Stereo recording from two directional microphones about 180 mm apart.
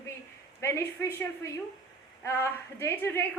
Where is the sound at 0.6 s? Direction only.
15° left (ahead or behind).